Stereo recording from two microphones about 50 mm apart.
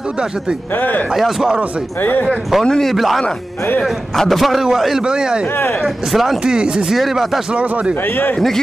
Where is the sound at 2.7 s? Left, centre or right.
Centre.